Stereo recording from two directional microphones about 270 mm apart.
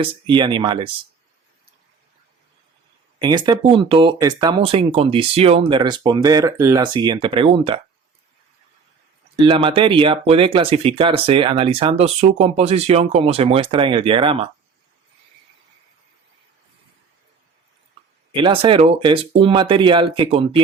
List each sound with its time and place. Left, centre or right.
0.0 s speech: centre
3.2 s speech: centre
9.5 s speech: centre
18.3 s speech: centre